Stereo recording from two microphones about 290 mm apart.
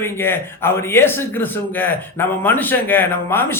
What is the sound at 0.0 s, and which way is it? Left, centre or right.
Speech, centre.